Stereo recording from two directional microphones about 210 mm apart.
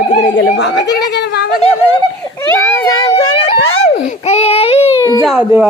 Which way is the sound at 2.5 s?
15° left (ahead or behind).